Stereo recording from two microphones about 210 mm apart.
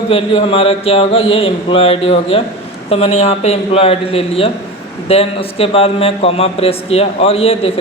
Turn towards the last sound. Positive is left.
turn(degrees=30)  # may be behind; listen again after turning